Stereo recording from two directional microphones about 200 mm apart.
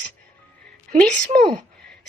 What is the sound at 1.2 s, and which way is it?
Speech, 40° right (ahead or behind).